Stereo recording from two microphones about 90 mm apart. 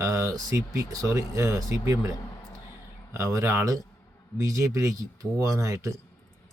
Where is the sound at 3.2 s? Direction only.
35° right (ahead or behind).